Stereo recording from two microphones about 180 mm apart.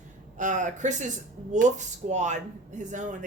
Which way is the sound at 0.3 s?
45° right (ahead or behind).